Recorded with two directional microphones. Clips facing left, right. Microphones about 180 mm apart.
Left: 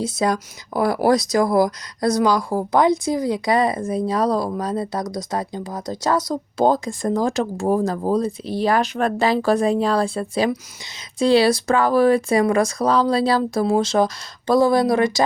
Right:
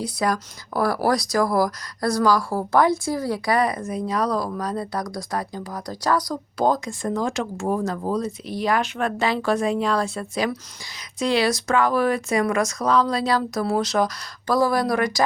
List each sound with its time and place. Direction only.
0.0 s speech: 25° left (ahead or behind)